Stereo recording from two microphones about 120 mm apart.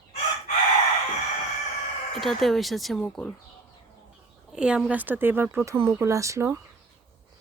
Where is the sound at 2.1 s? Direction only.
Centre (ahead or behind).